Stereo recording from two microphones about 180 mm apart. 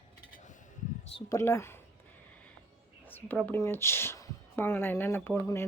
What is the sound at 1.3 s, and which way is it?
Speech, 15° left (ahead or behind).